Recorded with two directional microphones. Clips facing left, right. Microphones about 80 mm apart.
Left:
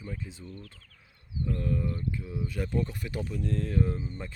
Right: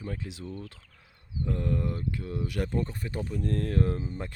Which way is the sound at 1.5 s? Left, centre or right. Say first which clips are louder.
Right 1 dB; right.